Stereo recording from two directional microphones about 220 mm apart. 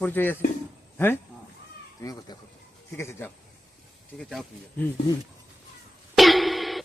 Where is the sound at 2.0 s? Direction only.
15° left (ahead or behind); by 4.5 s centre (ahead or behind).